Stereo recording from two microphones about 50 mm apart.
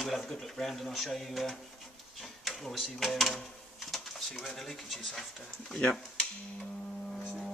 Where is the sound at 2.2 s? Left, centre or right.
Centre.